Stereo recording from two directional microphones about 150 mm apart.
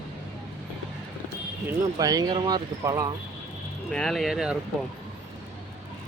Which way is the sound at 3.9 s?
Centre (ahead or behind).